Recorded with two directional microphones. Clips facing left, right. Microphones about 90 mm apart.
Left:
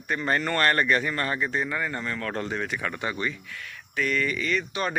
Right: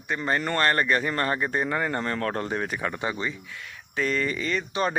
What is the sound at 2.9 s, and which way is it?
Speech, 20° right (ahead or behind).